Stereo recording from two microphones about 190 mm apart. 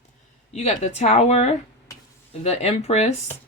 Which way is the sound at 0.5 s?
35° left (ahead or behind).